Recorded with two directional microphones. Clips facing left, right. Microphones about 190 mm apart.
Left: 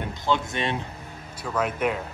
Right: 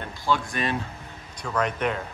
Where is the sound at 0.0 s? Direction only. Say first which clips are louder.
Left 1 dB; 20° left (ahead or behind).